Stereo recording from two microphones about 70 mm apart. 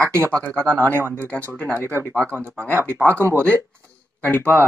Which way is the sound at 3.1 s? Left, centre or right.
Right.